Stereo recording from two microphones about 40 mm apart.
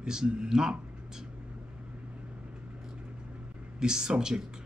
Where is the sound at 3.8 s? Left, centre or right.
Centre.